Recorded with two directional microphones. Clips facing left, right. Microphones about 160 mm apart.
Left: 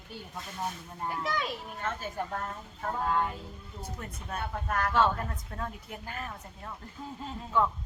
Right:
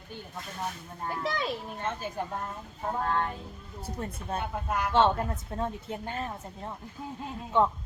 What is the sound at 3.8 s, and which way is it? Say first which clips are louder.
Speech: right 5 dB; 30° right (ahead or behind).